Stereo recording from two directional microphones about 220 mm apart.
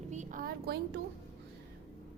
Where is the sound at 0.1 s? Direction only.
35° right (ahead or behind).